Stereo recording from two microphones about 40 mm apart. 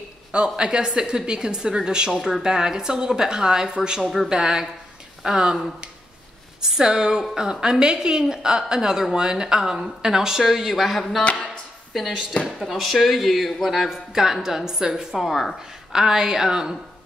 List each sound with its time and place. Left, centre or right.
0.3 s a woman's voice: right
6.6 s a woman's voice: centre
10.4 s a woman's voice: centre
15.9 s a woman's voice: centre